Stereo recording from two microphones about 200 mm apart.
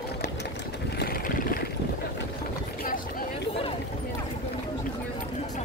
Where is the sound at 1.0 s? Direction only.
45° left (ahead or behind).